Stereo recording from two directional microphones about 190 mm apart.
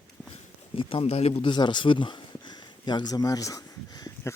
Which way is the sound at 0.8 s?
30° left (ahead or behind).